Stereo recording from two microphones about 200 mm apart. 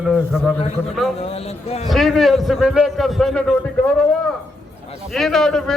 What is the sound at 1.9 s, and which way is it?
A man's voice, centre (ahead or behind).